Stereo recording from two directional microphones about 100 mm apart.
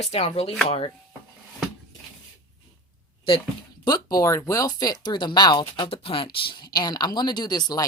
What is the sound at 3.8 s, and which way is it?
Speech, 40° left (ahead or behind).